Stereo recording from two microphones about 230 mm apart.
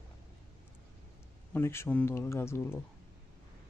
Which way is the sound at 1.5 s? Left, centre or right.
Centre.